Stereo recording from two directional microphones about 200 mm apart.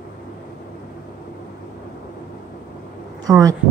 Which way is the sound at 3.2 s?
15° right (ahead or behind).